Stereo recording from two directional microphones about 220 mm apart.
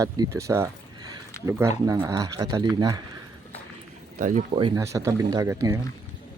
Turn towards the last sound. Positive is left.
turn(degrees=-15)  # may be behind; listen again after turning